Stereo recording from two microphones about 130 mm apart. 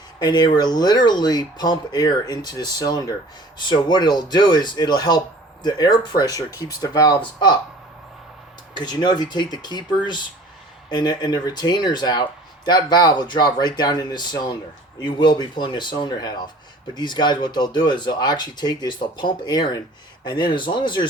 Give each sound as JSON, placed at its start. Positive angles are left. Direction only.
{"t": 0.2, "sound": "speech", "side_deg": 35}
{"t": 8.7, "sound": "speech", "side_deg": 35}